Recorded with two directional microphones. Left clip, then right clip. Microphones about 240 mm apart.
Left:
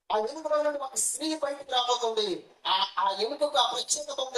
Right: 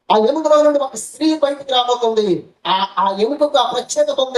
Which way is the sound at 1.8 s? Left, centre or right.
Right.